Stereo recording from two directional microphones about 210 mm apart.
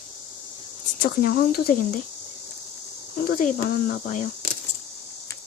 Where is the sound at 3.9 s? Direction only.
35° left (ahead or behind).